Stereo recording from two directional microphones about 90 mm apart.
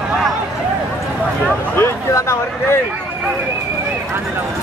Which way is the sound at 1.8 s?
30° left (ahead or behind).